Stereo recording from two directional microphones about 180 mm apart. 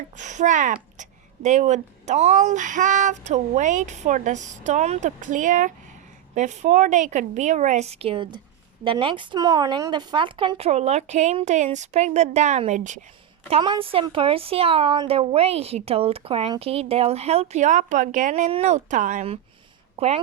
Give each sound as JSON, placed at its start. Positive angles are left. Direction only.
{"t": 0.2, "sound": "a woman's voice", "side_deg": -40}
{"t": 13.5, "sound": "a woman's voice", "side_deg": -30}